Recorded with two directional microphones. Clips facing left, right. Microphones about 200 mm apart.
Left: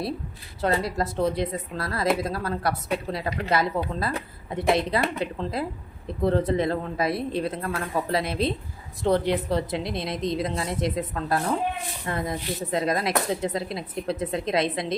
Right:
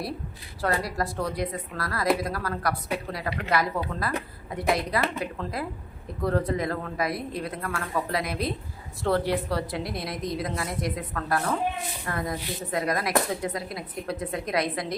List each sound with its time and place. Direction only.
0.6 s speech: 25° left (ahead or behind)